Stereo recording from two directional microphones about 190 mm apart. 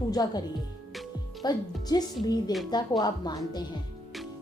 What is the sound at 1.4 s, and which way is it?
A woman's voice, 20° left (ahead or behind).